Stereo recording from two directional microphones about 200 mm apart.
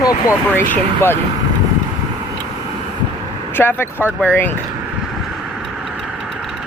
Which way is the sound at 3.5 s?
10° left (ahead or behind).